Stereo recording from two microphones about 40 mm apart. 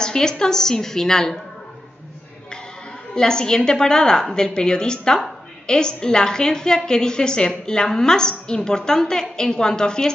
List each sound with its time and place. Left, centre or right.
0.0 s a woman's voice: centre
3.2 s a woman's voice: centre